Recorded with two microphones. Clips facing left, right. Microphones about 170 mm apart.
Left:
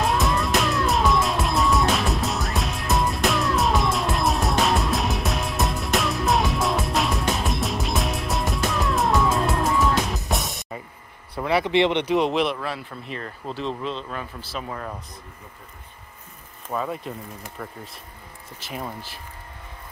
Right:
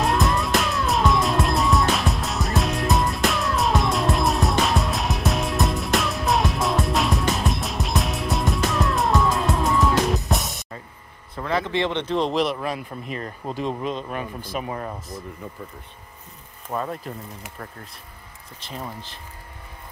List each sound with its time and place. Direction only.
0.0 s music: centre (ahead or behind)
11.3 s speech: 15° left (ahead or behind)
12.5 s speech: 15° right (ahead or behind)
16.7 s speech: centre (ahead or behind)
18.6 s speech: 10° left (ahead or behind)